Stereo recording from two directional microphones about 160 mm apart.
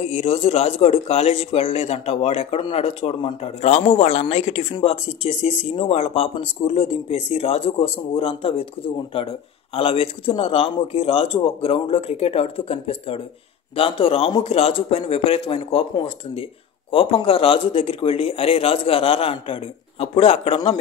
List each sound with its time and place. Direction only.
0.0 s speech: 40° left (ahead or behind)